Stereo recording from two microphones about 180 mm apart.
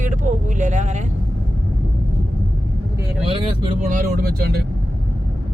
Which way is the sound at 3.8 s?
50° right (ahead or behind).